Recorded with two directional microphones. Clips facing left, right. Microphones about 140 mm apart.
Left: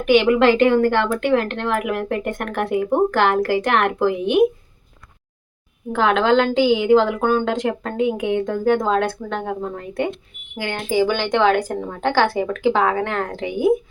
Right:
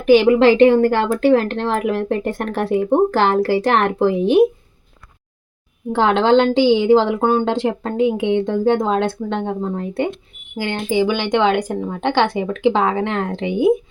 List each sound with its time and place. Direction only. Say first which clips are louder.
0.0 s speech: right 3 dB; 35° right (ahead or behind)
5.9 s a woman's voice: right 3 dB; 30° right (ahead or behind)
11.0 s a woman's voice: even; 15° right (ahead or behind)